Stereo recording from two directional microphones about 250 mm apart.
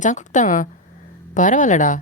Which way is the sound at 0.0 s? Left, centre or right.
Left.